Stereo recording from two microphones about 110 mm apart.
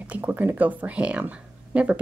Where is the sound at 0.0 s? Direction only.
15° right (ahead or behind).